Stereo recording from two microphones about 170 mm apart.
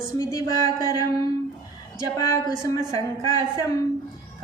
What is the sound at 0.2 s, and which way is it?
Speech, 20° left (ahead or behind).